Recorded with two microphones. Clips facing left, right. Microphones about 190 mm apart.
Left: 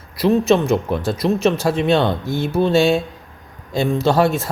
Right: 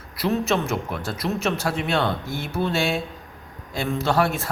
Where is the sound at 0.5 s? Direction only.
20° left (ahead or behind).